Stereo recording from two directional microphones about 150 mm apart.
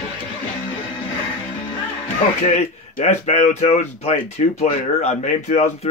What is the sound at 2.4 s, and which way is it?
Speech, 55° left (ahead or behind).